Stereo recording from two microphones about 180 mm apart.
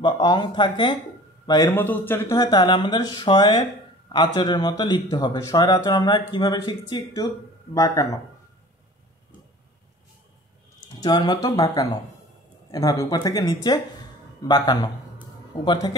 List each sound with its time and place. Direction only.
0.0 s speech: 25° left (ahead or behind)
1.7 s speech: 10° left (ahead or behind)
11.0 s speech: 20° left (ahead or behind)